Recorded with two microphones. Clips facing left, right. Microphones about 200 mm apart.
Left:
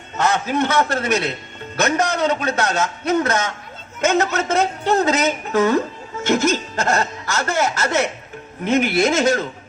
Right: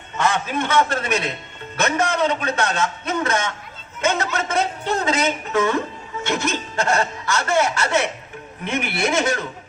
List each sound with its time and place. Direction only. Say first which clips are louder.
0.3 s speech: left 3 dB; 40° left (ahead or behind)